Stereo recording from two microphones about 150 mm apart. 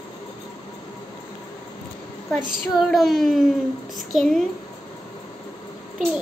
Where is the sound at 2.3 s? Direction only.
Centre (ahead or behind).